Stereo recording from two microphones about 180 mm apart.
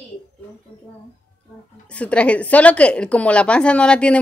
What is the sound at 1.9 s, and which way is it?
A woman's voice, 5° left (ahead or behind).